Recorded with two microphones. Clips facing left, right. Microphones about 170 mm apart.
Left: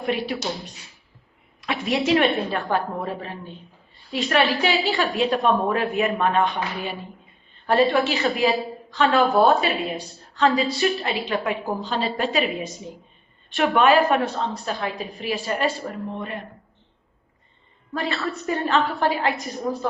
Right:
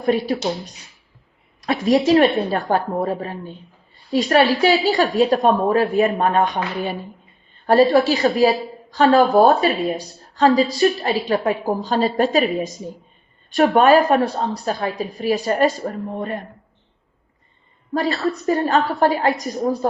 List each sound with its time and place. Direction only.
0.0 s a woman's voice: 40° right (ahead or behind)
1.6 s a woman's voice: 40° right (ahead or behind)
17.9 s a woman's voice: 40° right (ahead or behind)